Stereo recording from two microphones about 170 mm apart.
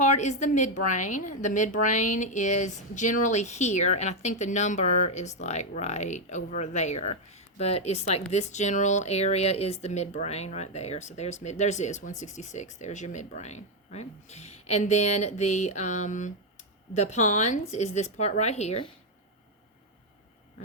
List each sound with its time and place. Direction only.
0.0 s speech: 45° left (ahead or behind)